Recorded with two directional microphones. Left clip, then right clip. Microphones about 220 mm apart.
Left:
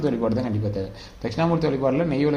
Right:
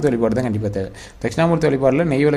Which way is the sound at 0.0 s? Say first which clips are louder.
Right 6 dB; 40° right (ahead or behind).